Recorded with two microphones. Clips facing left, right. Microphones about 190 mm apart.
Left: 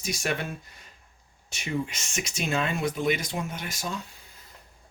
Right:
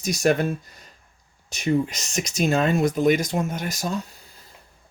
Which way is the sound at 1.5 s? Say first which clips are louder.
Right 8 dB; 40° right (ahead or behind).